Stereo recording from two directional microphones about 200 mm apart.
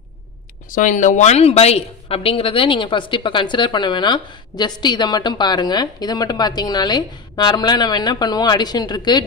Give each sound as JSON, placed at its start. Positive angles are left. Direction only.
{"t": 0.7, "sound": "a woman's voice", "side_deg": 40}